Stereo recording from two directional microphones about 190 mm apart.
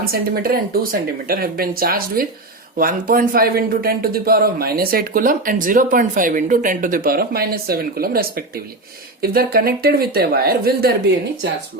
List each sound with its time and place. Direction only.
0.0 s a man's voice: 50° right (ahead or behind)